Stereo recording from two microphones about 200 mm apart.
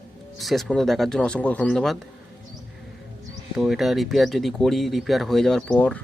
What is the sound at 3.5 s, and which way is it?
Speech, centre (ahead or behind).